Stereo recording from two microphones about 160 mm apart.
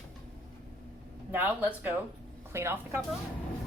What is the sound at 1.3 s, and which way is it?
A woman's voice, 10° right (ahead or behind).